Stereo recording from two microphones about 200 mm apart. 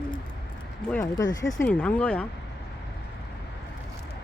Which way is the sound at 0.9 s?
15° left (ahead or behind).